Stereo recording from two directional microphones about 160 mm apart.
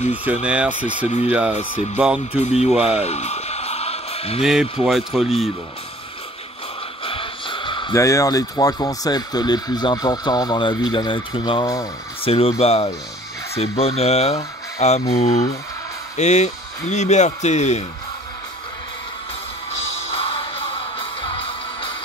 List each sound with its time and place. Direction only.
0.1 s speech: 10° right (ahead or behind)
1.0 s speech: 45° left (ahead or behind)
1.3 s speech: 10° right (ahead or behind)
2.4 s speech: 40° left (ahead or behind)
2.9 s a sound: 40° left (ahead or behind)
4.4 s speech: 5° right (ahead or behind)
7.1 s snort: 30° left (ahead or behind)
7.9 s speech: 20° left (ahead or behind)
11.6 s speech: 20° left (ahead or behind)
12.2 s speech: 35° left (ahead or behind)
20.1 s music: 35° left (ahead or behind)